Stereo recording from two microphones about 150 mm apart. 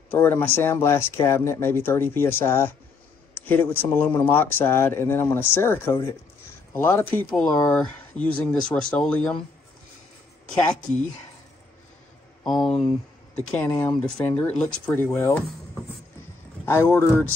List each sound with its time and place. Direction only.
0.1 s speech: 15° left (ahead or behind)
3.3 s a sound: 15° left (ahead or behind)
3.9 s speech: 15° left (ahead or behind)
7.7 s speech: 10° left (ahead or behind)
12.4 s speech: 5° left (ahead or behind)
13.7 s speech: 20° left (ahead or behind)
14.0 s speech: 5° left (ahead or behind)
16.6 s speech: 15° left (ahead or behind)